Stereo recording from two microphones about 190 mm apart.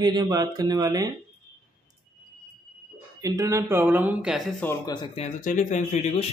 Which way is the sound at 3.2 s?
15° right (ahead or behind).